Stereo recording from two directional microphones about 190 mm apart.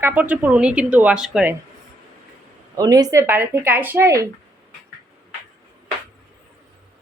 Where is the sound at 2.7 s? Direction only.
20° right (ahead or behind).